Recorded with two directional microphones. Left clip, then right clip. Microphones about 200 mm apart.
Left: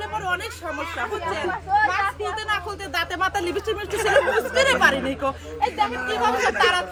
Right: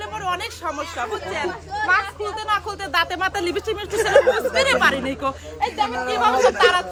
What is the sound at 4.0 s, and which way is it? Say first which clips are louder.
Speech: right 4 dB; 45° right (ahead or behind).